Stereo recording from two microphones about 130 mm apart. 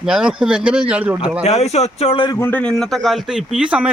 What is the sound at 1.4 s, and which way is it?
Speech, 55° left (ahead or behind).